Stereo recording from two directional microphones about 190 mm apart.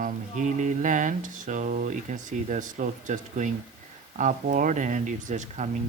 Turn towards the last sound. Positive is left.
turn(degrees=-40)  # may be behind; listen again after turning